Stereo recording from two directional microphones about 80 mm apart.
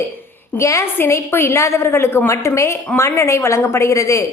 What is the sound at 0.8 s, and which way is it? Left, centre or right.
A woman's voice, left.